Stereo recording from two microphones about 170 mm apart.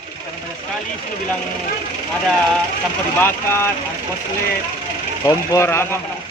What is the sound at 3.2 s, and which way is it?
Speech, 15° left (ahead or behind).